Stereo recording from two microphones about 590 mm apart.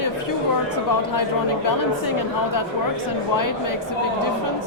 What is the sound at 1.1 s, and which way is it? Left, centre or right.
Speech, left.